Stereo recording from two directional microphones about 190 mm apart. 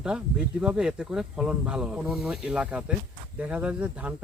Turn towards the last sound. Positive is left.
turn(degrees=-5)  # may be behind; listen again after turning